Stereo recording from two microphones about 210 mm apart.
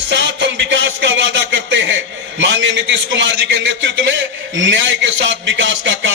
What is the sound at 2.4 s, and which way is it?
A man's voice, 60° right (ahead or behind).